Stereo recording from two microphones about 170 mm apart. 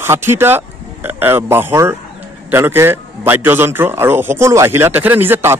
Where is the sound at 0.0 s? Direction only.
15° right (ahead or behind).